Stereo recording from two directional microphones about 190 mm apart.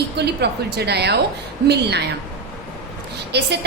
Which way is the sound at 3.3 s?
60° right (ahead or behind).